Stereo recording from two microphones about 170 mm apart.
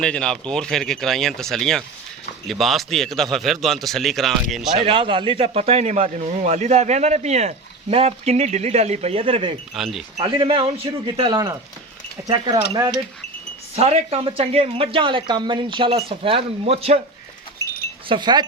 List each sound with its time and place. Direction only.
0.0 s speech: 5° left (ahead or behind)
4.8 s a man's voice: 30° right (ahead or behind)
9.7 s speech: centre (ahead or behind)
10.2 s a man's voice: 30° right (ahead or behind)
13.7 s a man's voice: 35° right (ahead or behind)
18.1 s speech: 25° right (ahead or behind)